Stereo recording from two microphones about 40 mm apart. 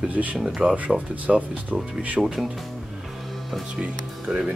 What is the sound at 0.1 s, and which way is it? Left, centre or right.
Speech, right.